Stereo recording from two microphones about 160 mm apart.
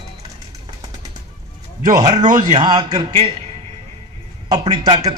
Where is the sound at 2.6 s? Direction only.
25° right (ahead or behind).